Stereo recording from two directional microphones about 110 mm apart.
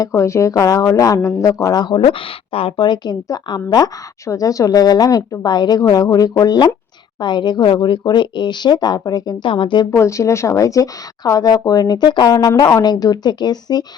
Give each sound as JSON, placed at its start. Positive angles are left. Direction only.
{"t": 0.0, "sound": "speech", "side_deg": 25}
{"t": 2.0, "sound": "speech", "side_deg": 55}
{"t": 9.5, "sound": "speech", "side_deg": 50}
{"t": 9.9, "sound": "speech", "side_deg": 25}